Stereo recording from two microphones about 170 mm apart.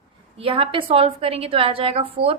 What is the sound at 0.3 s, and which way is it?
A woman's voice, 35° right (ahead or behind).